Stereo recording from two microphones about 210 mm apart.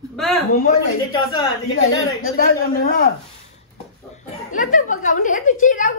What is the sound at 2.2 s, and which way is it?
Speech, 45° left (ahead or behind).